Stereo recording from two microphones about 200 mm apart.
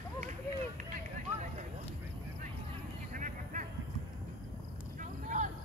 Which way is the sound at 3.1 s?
40° right (ahead or behind).